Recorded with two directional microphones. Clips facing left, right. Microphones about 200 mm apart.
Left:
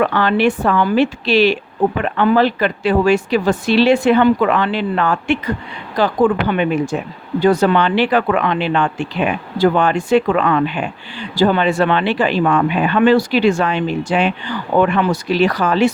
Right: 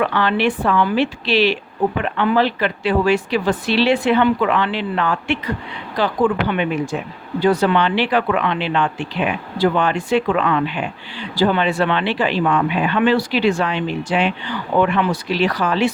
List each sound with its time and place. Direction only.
0.0 s speech: 45° left (ahead or behind)